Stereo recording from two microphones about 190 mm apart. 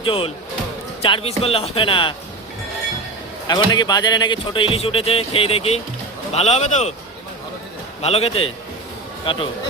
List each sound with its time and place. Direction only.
0.0 s a man's voice: 30° left (ahead or behind)
3.4 s a man's voice: 20° left (ahead or behind); by 6.9 s 35° left (ahead or behind)
8.0 s a man's voice: 30° left (ahead or behind)